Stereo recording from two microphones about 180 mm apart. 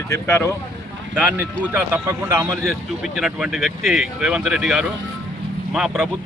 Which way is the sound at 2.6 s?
Centre (ahead or behind).